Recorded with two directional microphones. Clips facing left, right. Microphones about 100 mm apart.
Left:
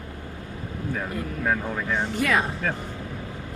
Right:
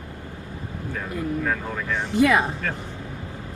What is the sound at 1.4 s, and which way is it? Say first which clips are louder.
Speech: left 1 dB; 15° left (ahead or behind).